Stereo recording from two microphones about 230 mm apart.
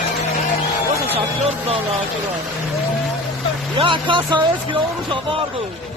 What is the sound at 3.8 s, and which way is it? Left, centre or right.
Speech, right.